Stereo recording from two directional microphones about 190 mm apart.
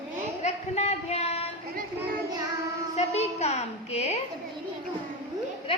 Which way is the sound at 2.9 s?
35° left (ahead or behind).